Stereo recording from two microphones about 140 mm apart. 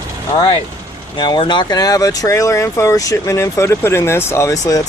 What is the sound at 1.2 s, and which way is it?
Speech, 35° left (ahead or behind).